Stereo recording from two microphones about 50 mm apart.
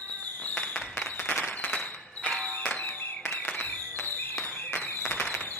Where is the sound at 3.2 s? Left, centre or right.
Left.